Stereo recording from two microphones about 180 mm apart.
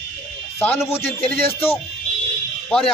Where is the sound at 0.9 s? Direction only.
15° left (ahead or behind).